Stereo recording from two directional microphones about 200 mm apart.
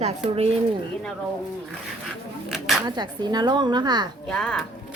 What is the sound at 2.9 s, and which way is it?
Speech, 20° right (ahead or behind).